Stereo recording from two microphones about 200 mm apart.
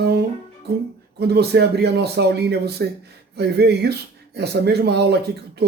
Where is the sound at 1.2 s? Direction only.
55° right (ahead or behind).